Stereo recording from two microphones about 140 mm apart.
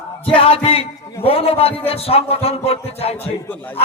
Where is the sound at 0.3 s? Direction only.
40° left (ahead or behind).